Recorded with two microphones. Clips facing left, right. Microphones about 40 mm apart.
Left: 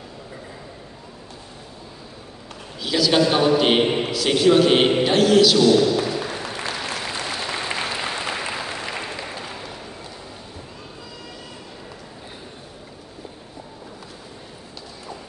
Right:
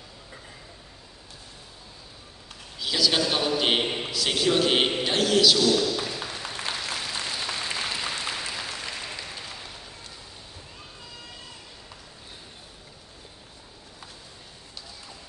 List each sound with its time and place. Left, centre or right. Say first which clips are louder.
2.8 s a man's voice: left 6 dB; centre
5.0 s music: left 6 dB; centre
5.6 s a man's voice: left 7 dB; left
6.0 s a sound: left 7 dB; left
6.7 s applause: left 4 dB; left